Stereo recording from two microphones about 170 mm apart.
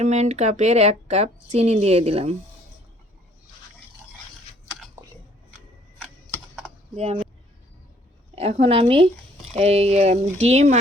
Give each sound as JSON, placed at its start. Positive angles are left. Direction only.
{"t": 0.0, "sound": "a woman's voice", "side_deg": -40}
{"t": 6.9, "sound": "a woman's voice", "side_deg": -40}
{"t": 8.4, "sound": "a woman's voice", "side_deg": -40}